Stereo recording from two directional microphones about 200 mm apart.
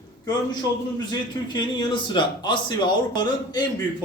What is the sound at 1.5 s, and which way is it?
A man's voice, 25° left (ahead or behind).